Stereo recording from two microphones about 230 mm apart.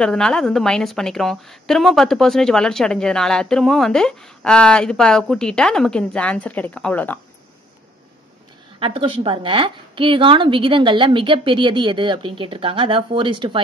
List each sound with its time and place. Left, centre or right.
0.0 s a woman's voice: centre
8.7 s a woman's voice: right